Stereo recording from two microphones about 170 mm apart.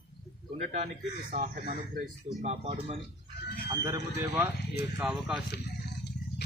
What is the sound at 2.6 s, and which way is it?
Speech, 35° right (ahead or behind).